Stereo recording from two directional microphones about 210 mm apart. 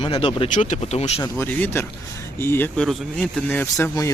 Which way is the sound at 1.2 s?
10° left (ahead or behind).